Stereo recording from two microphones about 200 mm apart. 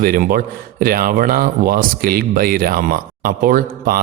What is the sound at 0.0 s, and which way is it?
Speech, 45° right (ahead or behind).